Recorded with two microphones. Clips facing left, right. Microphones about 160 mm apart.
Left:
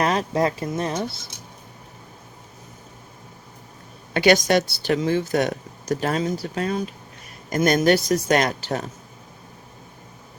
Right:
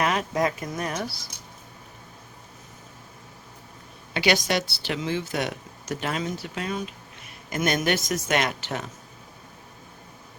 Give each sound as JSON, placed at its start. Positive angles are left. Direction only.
{"t": 0.0, "sound": "speech", "side_deg": 35}
{"t": 4.1, "sound": "speech", "side_deg": 50}